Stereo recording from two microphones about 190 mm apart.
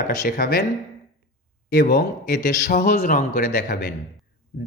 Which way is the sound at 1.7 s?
50° left (ahead or behind).